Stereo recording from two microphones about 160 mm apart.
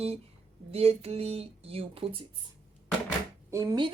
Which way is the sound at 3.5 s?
25° right (ahead or behind).